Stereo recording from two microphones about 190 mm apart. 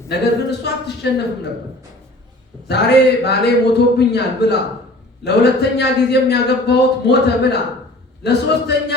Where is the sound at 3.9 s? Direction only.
60° left (ahead or behind).